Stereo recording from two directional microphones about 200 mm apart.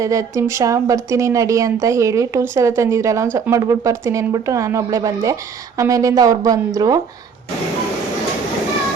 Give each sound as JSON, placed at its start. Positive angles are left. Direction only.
{"t": 0.0, "sound": "speech", "side_deg": -15}